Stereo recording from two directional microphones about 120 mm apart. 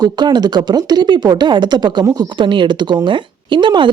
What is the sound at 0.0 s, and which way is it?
Speech, 35° right (ahead or behind).